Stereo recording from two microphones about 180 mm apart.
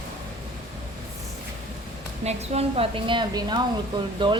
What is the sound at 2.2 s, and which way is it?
Speech, 35° right (ahead or behind).